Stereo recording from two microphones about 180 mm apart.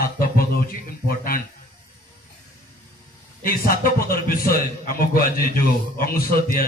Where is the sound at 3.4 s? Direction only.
55° left (ahead or behind).